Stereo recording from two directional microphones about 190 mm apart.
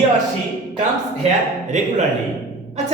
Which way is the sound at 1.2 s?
35° right (ahead or behind).